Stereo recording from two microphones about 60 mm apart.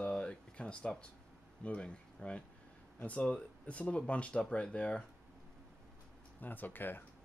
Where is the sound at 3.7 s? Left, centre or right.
Left.